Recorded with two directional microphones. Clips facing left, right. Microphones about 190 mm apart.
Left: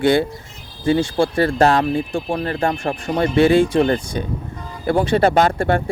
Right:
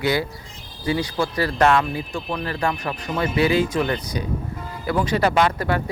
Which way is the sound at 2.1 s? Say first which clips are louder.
Left 5 dB; 30° left (ahead or behind).